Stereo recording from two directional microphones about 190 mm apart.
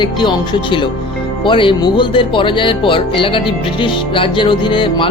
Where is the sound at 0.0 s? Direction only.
25° left (ahead or behind).